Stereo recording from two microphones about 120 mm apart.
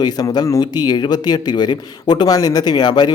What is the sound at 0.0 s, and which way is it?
Speech, 35° left (ahead or behind).